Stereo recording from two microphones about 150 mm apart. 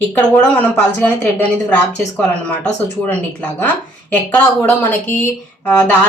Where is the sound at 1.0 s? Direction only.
10° left (ahead or behind).